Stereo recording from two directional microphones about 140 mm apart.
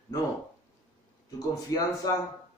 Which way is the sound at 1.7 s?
25° left (ahead or behind).